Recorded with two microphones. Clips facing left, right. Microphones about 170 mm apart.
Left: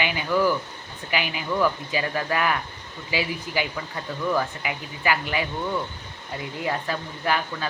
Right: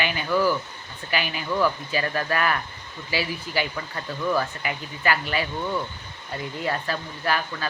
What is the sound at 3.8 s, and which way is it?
Speech, 5° left (ahead or behind).